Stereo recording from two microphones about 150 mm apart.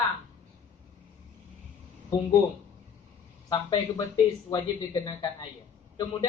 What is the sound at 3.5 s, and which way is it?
Speech, 30° left (ahead or behind).